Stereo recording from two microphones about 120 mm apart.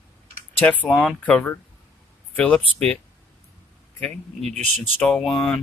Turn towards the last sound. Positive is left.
turn(degrees=5)  # may be behind; listen again after turning